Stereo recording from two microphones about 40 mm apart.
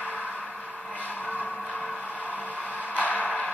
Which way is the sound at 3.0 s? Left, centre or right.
Left.